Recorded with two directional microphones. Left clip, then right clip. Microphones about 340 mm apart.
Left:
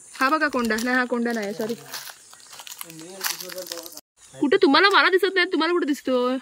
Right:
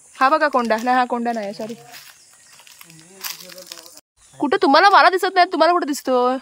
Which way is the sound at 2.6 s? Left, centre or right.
Centre.